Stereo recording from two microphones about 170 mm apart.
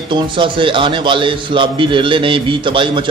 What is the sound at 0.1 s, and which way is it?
A man's voice, 30° right (ahead or behind).